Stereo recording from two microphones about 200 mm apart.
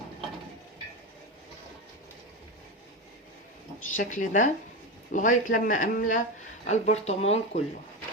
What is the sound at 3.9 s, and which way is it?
Speech, 40° left (ahead or behind).